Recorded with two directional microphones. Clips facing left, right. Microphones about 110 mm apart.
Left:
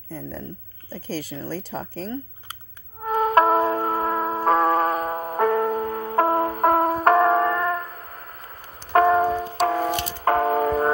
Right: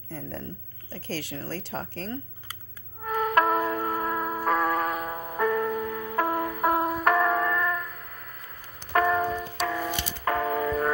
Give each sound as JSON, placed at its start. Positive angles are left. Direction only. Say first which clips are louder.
{"t": 0.1, "sound": "speech", "louder": "left 3 dB", "side_deg": 5}
{"t": 3.0, "sound": "music", "louder": "left 5 dB", "side_deg": 35}